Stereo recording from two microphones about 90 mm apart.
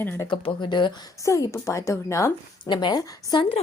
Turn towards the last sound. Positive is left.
turn(degrees=55)  # may be behind; listen again after turning